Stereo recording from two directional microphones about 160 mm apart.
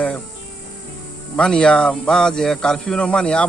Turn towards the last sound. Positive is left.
turn(degrees=5)  # may be behind; listen again after turning